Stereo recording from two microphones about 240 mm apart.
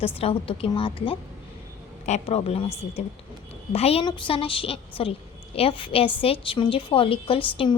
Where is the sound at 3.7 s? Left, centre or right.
Left.